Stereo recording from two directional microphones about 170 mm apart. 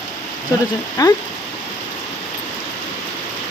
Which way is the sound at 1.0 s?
20° left (ahead or behind).